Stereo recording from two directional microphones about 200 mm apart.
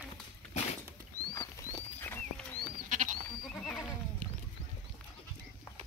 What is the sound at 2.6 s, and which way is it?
Goat, 40° right (ahead or behind).